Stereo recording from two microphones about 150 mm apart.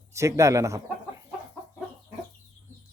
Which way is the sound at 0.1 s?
20° right (ahead or behind).